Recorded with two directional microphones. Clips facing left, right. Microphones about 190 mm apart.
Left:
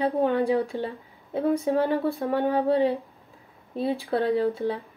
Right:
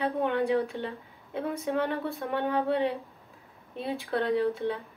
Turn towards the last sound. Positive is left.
turn(degrees=35)  # may be behind; listen again after turning